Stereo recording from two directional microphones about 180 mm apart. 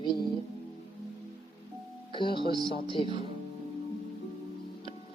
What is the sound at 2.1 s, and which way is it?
Speech, 25° left (ahead or behind).